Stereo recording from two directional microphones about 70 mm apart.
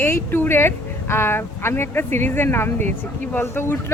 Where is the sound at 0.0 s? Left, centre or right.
Left.